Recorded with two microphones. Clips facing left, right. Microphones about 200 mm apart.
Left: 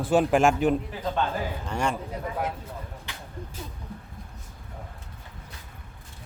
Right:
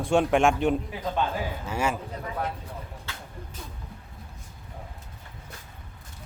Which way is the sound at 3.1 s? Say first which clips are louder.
Right 1 dB; 15° left (ahead or behind).